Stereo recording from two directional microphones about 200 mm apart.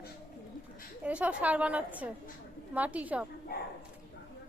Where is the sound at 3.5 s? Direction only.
50° left (ahead or behind).